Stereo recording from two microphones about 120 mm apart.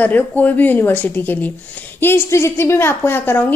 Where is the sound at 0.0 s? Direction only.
15° left (ahead or behind).